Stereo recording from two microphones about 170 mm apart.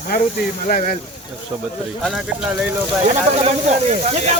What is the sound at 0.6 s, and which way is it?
Speech, 50° left (ahead or behind).